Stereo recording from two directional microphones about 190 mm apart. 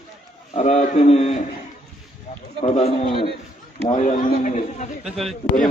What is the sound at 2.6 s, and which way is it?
Speech, 35° left (ahead or behind).